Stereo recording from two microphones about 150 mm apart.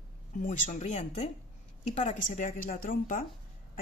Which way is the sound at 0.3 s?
60° left (ahead or behind).